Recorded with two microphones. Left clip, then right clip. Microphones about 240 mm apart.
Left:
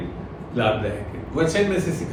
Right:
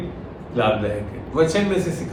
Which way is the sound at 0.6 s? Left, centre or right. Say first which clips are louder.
Right 2 dB; centre.